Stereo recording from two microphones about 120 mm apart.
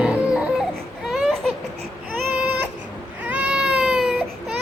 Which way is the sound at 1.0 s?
Centre (ahead or behind).